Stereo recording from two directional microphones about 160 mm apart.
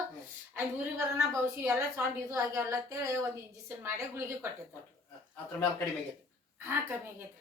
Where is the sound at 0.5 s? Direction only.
15° right (ahead or behind).